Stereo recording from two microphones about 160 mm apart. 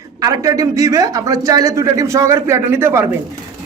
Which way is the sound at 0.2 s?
20° right (ahead or behind).